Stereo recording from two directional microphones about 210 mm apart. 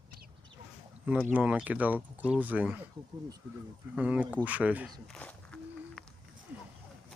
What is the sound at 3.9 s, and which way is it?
Speech, 5° right (ahead or behind).